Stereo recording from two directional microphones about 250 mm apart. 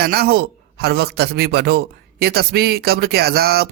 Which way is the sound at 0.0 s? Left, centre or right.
Right.